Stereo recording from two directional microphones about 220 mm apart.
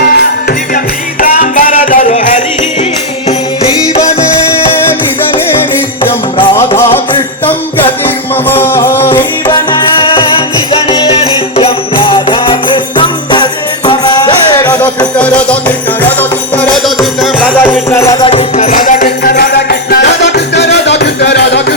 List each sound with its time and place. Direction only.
1.2 s music: 40° left (ahead or behind)
6.1 s music: 25° left (ahead or behind)
6.6 s music: 10° left (ahead or behind)
8.0 s music: 10° left (ahead or behind)
10.0 s music: 25° left (ahead or behind)
11.5 s jingle bell: 25° left (ahead or behind)
14.8 s music: 5° left (ahead or behind)
16.6 s music: 5° left (ahead or behind); by 21.6 s 50° left (ahead or behind)